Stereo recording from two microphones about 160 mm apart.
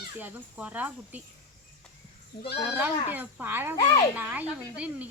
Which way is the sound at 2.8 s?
10° right (ahead or behind).